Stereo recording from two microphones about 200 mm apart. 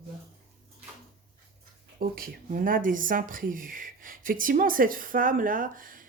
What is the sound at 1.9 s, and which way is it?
Speech, 50° right (ahead or behind).